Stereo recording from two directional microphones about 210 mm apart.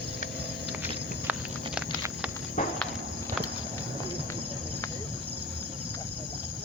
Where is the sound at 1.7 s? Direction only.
5° right (ahead or behind).